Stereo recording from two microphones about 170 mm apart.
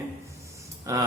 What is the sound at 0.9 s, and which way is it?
Speech, 15° right (ahead or behind).